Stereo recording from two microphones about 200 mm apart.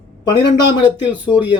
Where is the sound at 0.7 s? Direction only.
20° left (ahead or behind).